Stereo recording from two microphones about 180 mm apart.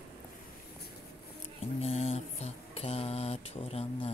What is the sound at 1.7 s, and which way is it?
Mantra, 35° left (ahead or behind).